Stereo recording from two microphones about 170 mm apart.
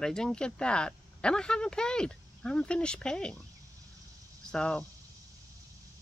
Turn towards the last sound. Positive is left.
turn(degrees=5)  # may be behind; listen again after turning